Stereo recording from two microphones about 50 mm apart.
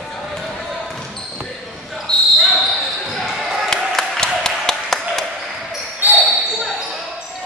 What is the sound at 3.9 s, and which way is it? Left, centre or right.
Applause, centre.